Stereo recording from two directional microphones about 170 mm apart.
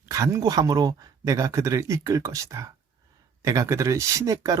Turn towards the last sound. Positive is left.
turn(degrees=-20)  # may be behind; listen again after turning